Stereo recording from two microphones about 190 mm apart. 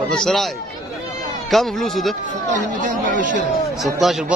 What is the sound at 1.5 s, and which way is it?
Speech, centre (ahead or behind).